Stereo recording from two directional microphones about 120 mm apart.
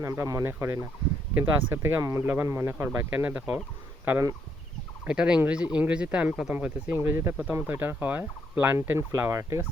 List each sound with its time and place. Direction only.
0.0 s speech: 30° right (ahead or behind)
5.0 s speech: 10° right (ahead or behind); by 9.6 s 25° right (ahead or behind)